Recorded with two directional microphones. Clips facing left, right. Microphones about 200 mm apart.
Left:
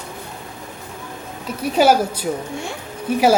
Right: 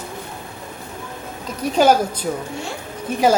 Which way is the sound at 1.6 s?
10° left (ahead or behind).